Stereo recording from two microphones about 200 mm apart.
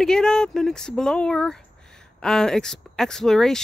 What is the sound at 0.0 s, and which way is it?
Speech, 5° left (ahead or behind).